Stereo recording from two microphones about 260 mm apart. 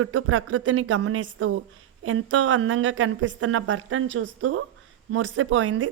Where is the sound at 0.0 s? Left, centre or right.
Right.